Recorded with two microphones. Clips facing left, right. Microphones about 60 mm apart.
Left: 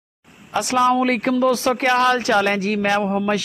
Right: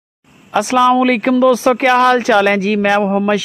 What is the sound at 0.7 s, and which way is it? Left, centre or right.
Speech, right.